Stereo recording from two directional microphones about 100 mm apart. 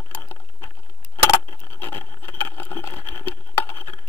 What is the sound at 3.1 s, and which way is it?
Patter, 25° left (ahead or behind).